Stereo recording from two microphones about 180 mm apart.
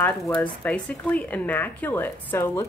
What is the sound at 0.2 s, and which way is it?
A woman's voice, 5° left (ahead or behind).